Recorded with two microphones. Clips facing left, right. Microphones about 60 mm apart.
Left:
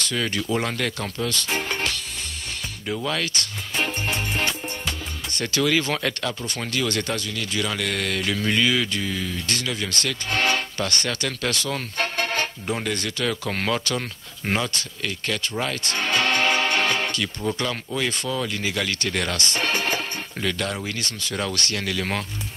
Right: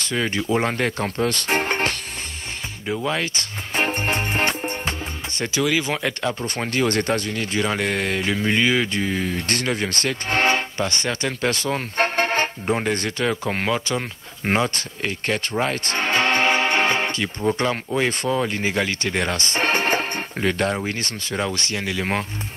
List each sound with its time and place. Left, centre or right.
0.0 s speech: right
2.9 s music: right
5.3 s speech: right
5.6 s speech: centre
6.2 s speech: right